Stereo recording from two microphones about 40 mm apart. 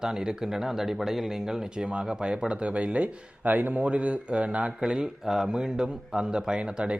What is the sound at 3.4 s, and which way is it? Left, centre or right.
Speech, right.